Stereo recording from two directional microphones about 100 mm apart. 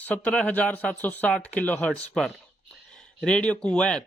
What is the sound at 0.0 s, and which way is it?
Speech, 15° left (ahead or behind).